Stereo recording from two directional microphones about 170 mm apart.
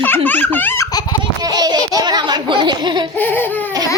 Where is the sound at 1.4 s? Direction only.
25° right (ahead or behind).